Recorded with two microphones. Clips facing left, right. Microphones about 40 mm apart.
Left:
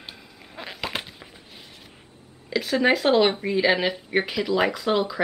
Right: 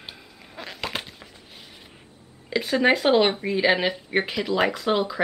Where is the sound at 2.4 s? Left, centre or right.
Centre.